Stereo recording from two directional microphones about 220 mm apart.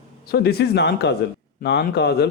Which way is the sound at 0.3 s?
45° left (ahead or behind).